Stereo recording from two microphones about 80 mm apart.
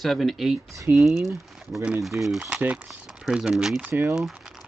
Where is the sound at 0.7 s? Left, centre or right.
Right.